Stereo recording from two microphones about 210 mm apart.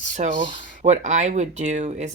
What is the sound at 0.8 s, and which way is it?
Speech, 35° right (ahead or behind).